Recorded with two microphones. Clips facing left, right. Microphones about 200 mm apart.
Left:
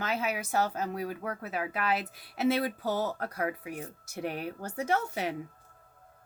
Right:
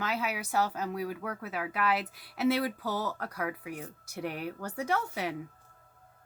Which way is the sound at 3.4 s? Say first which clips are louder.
Left 2 dB; 30° left (ahead or behind).